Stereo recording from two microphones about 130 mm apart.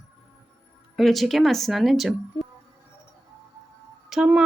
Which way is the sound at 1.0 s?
Centre (ahead or behind).